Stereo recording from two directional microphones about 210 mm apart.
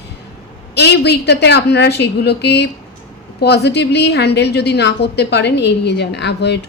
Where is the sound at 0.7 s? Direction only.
55° left (ahead or behind).